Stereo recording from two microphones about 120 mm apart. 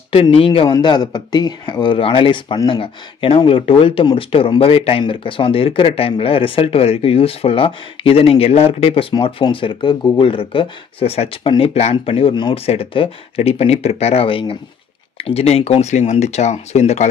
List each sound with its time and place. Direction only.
0.1 s speech: 50° left (ahead or behind)
0.7 s speech: 35° left (ahead or behind); by 9.0 s 55° left (ahead or behind)
9.1 s speech: 45° left (ahead or behind); by 17.1 s 65° left (ahead or behind)